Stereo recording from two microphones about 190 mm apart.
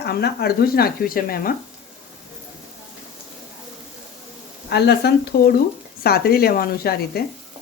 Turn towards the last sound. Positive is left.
turn(degrees=55)  # may be behind; listen again after turning